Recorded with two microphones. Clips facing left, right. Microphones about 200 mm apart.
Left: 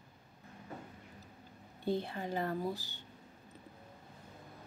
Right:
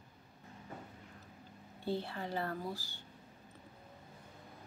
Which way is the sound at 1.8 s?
15° left (ahead or behind).